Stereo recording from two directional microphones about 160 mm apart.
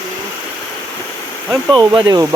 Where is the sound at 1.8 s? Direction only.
30° right (ahead or behind).